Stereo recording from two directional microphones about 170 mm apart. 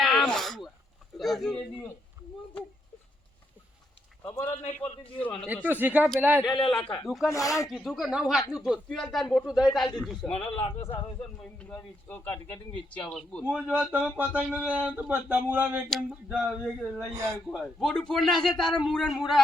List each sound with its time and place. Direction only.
0.0 s a sound: centre (ahead or behind)
1.2 s speech: centre (ahead or behind)
4.2 s a man's voice: 15° left (ahead or behind)
5.6 s speech: 10° right (ahead or behind)
6.7 s speech: 5° left (ahead or behind)
7.3 s speech: 20° left (ahead or behind)
7.7 s speech: centre (ahead or behind)
10.5 s speech: 35° left (ahead or behind)
11.6 s speech: 10° left (ahead or behind); by 15.8 s 10° right (ahead or behind)
15.9 s speech: centre (ahead or behind)